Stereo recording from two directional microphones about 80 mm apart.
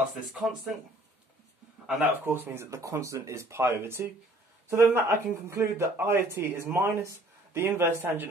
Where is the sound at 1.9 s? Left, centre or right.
Right.